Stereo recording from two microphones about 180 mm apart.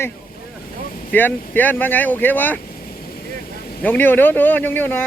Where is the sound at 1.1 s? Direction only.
10° left (ahead or behind).